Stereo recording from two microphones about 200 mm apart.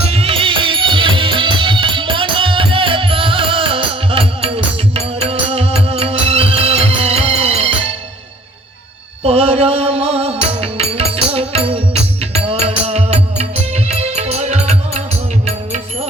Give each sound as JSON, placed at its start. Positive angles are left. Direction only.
{"t": 0.0, "sound": "music", "side_deg": -30}
{"t": 9.2, "sound": "music", "side_deg": -30}